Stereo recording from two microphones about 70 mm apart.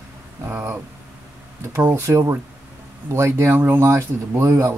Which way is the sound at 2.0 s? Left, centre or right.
Right.